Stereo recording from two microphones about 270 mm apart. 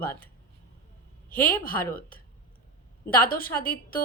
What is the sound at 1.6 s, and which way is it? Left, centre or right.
Speech, left.